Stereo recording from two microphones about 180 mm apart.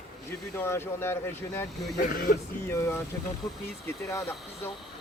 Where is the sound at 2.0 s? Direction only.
50° left (ahead or behind).